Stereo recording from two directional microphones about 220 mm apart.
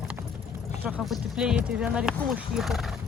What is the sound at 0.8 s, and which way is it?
Speech, 5° right (ahead or behind).